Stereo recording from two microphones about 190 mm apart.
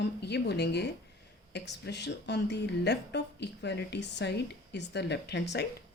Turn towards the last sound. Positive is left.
turn(degrees=65)  # may be behind; listen again after turning